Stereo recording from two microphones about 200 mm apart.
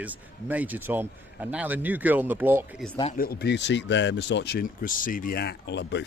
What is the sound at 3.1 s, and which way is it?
Speech, 50° left (ahead or behind).